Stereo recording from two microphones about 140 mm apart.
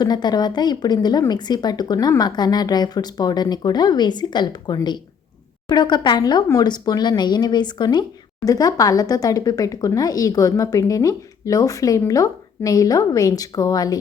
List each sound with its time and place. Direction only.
0.0 s speech: 30° left (ahead or behind)